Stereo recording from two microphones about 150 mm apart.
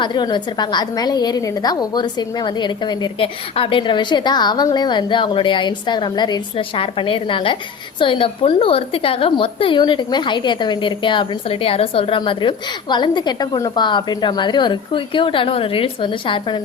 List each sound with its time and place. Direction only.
0.0 s a woman's voice: 30° left (ahead or behind)